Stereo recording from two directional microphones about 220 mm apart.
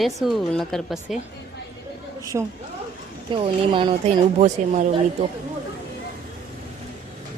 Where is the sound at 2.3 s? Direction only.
15° right (ahead or behind); by 4.9 s 35° right (ahead or behind).